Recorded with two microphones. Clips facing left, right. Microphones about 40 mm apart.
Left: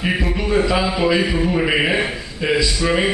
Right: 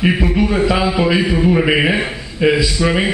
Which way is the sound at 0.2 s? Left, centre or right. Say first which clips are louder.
Right 3 dB; centre.